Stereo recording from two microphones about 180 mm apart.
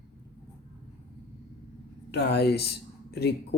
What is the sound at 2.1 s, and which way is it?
Speech, 65° left (ahead or behind).